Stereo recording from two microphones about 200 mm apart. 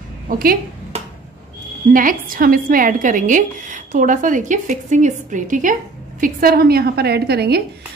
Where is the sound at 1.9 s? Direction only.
45° right (ahead or behind).